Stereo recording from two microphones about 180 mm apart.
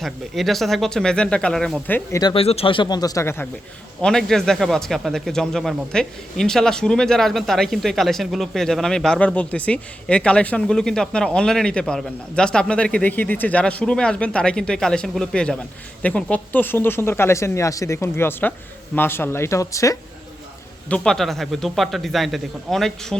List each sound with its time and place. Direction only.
0.0 s speech: centre (ahead or behind)
2.1 s speech: 25° left (ahead or behind)
4.0 s speech: centre (ahead or behind); by 20.0 s 15° left (ahead or behind)
20.9 s speech: 5° left (ahead or behind)